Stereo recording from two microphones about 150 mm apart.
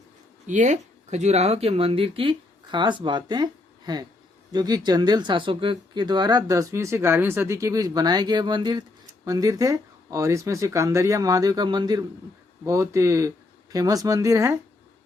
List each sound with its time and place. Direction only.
0.4 s speech: 55° right (ahead or behind); by 14.6 s 20° right (ahead or behind)